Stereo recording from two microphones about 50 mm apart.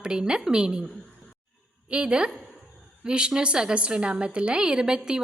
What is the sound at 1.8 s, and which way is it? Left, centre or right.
A woman's voice, centre.